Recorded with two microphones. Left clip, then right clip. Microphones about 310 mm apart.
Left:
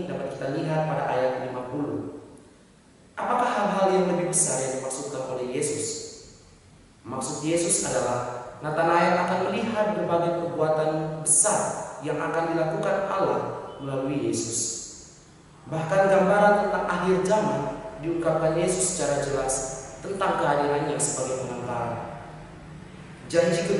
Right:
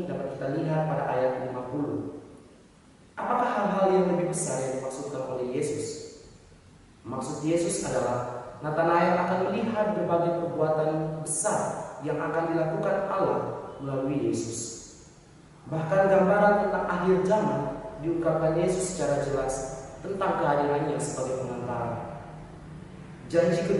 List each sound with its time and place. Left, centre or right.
0.1 s a sound: centre
0.6 s a man's voice: centre
3.2 s a sound: centre
7.1 s a man's voice: centre
15.7 s a man's voice: centre
23.3 s a man's voice: centre